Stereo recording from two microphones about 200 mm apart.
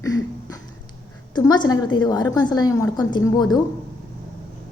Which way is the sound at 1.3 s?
20° left (ahead or behind).